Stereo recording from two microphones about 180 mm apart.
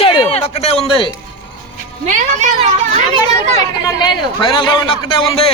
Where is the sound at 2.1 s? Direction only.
40° right (ahead or behind).